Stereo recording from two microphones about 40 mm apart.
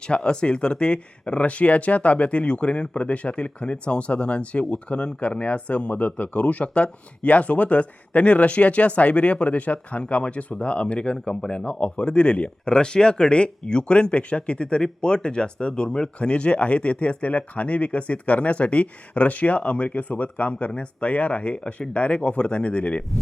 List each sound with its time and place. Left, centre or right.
0.1 s speech: left